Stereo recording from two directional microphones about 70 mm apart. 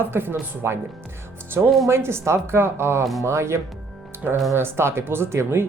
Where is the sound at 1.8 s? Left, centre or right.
Right.